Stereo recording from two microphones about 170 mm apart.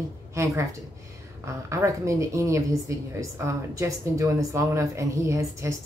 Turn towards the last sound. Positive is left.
turn(degrees=-20)  # may be behind; listen again after turning